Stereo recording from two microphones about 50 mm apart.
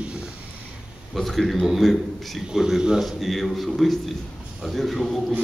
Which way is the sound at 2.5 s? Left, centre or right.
Centre.